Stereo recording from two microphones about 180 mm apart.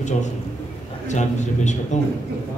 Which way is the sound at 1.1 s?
40° left (ahead or behind).